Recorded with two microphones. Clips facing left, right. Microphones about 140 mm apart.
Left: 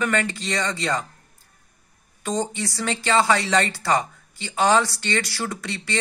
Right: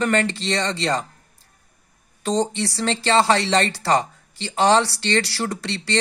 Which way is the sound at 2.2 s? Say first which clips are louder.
Right 4 dB; 30° right (ahead or behind).